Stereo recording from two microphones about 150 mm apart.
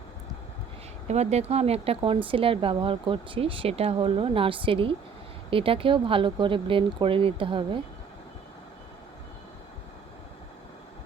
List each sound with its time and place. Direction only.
1.0 s a woman's voice: 45° right (ahead or behind)